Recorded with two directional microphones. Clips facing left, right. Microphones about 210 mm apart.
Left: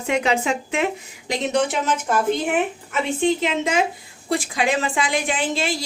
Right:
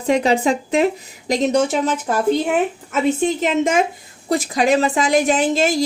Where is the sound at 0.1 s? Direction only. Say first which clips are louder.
Right 5 dB; 40° right (ahead or behind).